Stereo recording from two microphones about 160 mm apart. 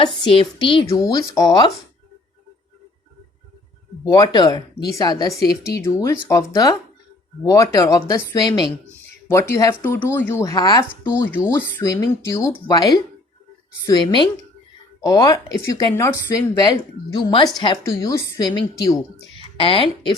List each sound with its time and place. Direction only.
0.0 s a woman's voice: 30° left (ahead or behind)
4.0 s a woman's voice: 20° left (ahead or behind)
19.4 s a woman's voice: 35° left (ahead or behind)